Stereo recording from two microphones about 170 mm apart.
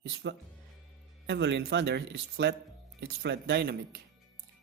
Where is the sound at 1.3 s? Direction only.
90° right.